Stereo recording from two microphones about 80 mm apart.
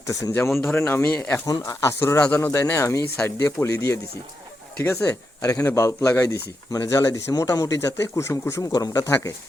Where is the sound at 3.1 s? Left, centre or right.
Left.